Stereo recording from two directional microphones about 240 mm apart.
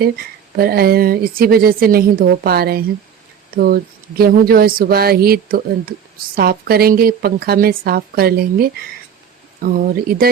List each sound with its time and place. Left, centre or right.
0.5 s a woman's voice: right